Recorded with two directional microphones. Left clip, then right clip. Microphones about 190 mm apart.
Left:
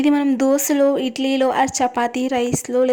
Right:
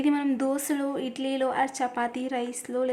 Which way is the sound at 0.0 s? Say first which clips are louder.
Left 9 dB; 30° left (ahead or behind).